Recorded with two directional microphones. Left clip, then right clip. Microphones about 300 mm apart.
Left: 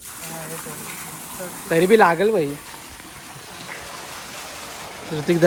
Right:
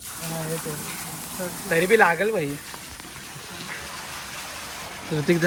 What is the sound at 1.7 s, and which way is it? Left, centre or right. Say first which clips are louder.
Speech: left 3 dB; centre.